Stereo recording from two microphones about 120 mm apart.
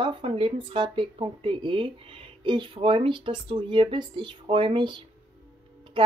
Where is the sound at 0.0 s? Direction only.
45° right (ahead or behind).